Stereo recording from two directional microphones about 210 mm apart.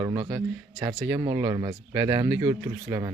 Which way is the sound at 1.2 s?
15° right (ahead or behind).